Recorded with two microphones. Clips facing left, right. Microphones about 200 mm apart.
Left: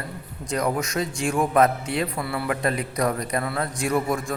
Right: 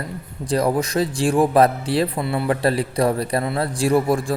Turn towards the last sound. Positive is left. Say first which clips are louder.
# right 6 dB
turn(degrees=-30)  # may be behind; listen again after turning